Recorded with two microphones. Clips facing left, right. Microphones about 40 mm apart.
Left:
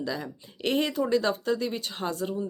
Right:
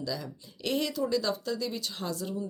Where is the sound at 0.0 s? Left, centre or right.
Left.